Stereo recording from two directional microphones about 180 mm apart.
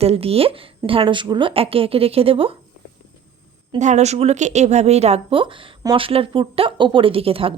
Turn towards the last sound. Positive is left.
turn(degrees=-30)  # may be behind; listen again after turning